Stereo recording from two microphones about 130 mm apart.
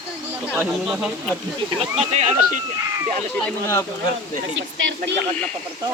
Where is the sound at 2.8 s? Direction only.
25° right (ahead or behind).